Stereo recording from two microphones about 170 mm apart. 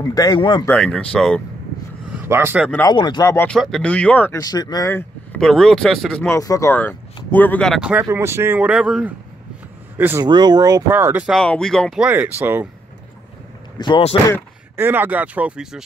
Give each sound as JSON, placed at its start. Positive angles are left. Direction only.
{"t": 0.1, "sound": "speech", "side_deg": 25}
{"t": 0.7, "sound": "speech", "side_deg": 5}
{"t": 2.1, "sound": "speech", "side_deg": -15}
{"t": 2.9, "sound": "speech", "side_deg": 25}
{"t": 3.4, "sound": "speech", "side_deg": 5}
{"t": 4.4, "sound": "speech", "side_deg": 20}
{"t": 5.4, "sound": "speech", "side_deg": 0}
{"t": 6.2, "sound": "speech", "side_deg": 20}
{"t": 8.0, "sound": "speech", "side_deg": -15}
{"t": 10.2, "sound": "speech", "side_deg": -25}
{"t": 11.3, "sound": "speech", "side_deg": 5}
{"t": 13.7, "sound": "speech", "side_deg": 30}
{"t": 14.8, "sound": "speech", "side_deg": -10}